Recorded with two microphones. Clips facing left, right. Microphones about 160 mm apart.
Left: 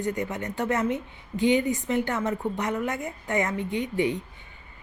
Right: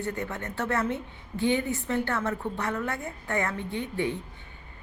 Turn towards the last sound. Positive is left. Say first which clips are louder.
# left 4 dB
turn(degrees=15)  # may be behind; listen again after turning